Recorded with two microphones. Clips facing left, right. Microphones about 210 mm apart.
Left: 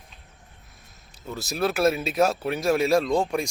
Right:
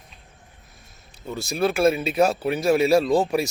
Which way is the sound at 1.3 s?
Centre (ahead or behind).